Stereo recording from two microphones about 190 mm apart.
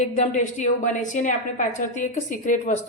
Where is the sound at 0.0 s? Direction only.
40° left (ahead or behind).